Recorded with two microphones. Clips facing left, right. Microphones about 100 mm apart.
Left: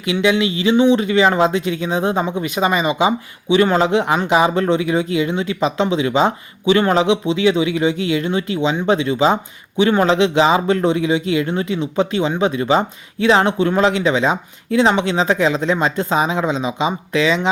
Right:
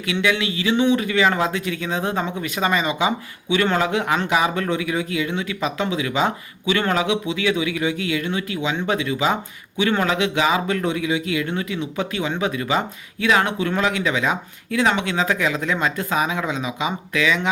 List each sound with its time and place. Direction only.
0.0 s speech: 20° left (ahead or behind)